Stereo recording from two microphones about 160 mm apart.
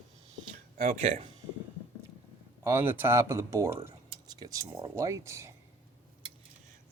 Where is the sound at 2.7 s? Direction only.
15° right (ahead or behind).